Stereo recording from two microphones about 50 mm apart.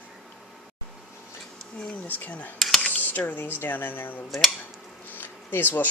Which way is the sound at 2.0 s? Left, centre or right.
Left.